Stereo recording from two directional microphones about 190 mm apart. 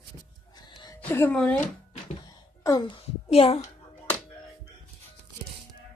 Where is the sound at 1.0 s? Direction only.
10° left (ahead or behind).